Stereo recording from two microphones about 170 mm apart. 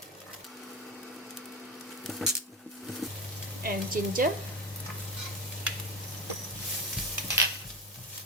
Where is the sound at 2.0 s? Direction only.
Centre (ahead or behind).